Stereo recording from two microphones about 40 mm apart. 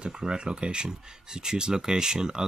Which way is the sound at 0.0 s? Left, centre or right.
Centre.